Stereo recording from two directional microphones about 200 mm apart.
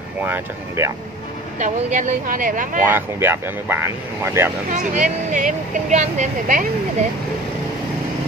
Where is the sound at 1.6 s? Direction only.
40° right (ahead or behind).